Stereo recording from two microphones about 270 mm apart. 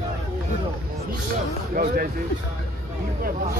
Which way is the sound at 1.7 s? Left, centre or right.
Right.